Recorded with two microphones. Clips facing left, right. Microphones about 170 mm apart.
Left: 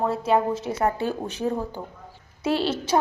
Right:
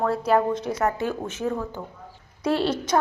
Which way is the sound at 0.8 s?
30° left (ahead or behind).